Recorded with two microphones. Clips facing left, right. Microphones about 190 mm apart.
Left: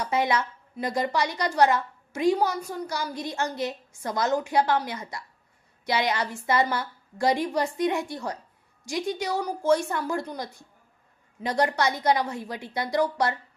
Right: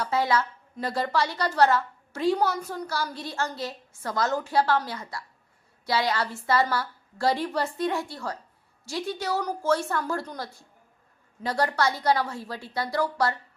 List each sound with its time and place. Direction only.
0.0 s a woman's voice: 20° left (ahead or behind)